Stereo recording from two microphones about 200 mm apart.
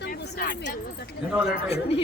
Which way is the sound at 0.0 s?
45° left (ahead or behind).